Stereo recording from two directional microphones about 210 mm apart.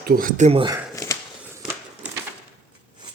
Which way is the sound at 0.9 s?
15° left (ahead or behind).